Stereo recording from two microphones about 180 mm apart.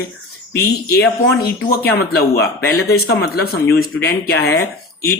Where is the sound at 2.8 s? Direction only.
65° left (ahead or behind).